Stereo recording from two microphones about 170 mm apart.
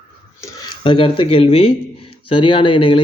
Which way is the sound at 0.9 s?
30° left (ahead or behind).